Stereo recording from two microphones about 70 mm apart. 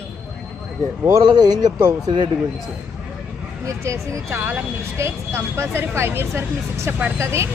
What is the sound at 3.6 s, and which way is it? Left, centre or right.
Speech, right.